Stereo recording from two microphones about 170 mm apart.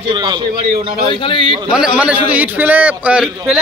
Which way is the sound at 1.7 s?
5° right (ahead or behind).